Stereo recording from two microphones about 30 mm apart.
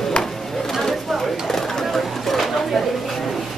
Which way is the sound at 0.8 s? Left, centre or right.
Centre.